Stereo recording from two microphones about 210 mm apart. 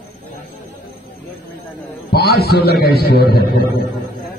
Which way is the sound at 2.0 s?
50° left (ahead or behind).